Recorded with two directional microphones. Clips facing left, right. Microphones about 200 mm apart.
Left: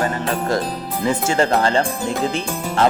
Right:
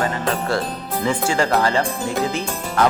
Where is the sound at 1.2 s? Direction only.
25° left (ahead or behind).